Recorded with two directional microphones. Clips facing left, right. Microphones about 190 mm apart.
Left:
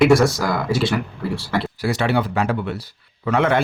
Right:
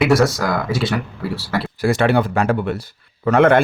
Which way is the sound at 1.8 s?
50° right (ahead or behind).